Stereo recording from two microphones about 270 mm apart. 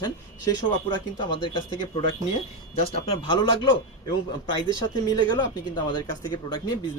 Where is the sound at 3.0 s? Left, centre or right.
Centre.